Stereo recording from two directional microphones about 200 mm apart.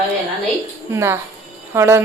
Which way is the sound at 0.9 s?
10° right (ahead or behind).